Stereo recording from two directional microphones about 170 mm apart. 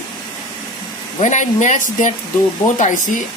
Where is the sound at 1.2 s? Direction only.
45° left (ahead or behind).